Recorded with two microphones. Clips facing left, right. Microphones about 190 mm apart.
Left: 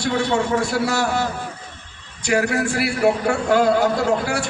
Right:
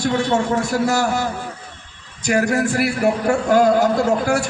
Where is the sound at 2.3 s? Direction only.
40° right (ahead or behind).